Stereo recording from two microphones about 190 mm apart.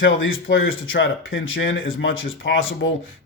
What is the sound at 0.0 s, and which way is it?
Speech, 90° left.